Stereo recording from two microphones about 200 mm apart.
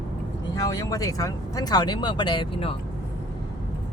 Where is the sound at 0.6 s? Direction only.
15° left (ahead or behind).